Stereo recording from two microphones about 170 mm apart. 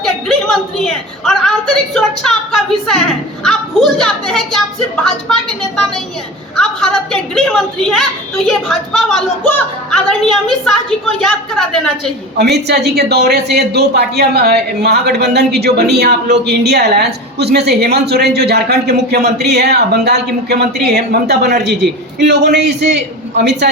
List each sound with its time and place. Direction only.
0.0 s a sound: centre (ahead or behind)
1.2 s a woman's voice: centre (ahead or behind)
12.4 s a woman's voice: 75° right (ahead or behind)